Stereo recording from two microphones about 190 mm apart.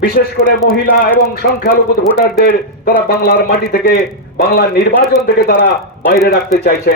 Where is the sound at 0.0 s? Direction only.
50° left (ahead or behind).